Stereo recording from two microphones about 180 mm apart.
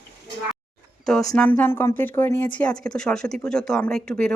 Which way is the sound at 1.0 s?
Centre (ahead or behind).